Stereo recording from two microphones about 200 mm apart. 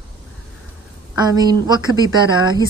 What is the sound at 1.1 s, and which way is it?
Speech, 20° right (ahead or behind).